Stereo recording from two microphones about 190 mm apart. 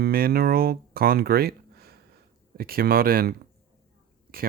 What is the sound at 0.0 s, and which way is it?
Speech, 55° right (ahead or behind).